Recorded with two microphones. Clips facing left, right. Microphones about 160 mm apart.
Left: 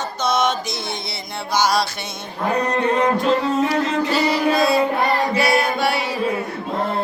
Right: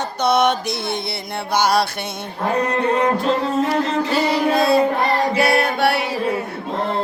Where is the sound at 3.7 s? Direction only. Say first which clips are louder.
Even; 55° right (ahead or behind).